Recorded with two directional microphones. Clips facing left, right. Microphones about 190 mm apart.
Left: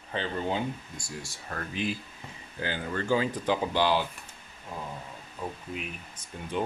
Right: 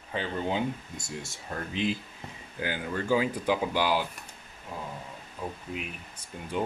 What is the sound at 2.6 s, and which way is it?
Speech, 10° right (ahead or behind).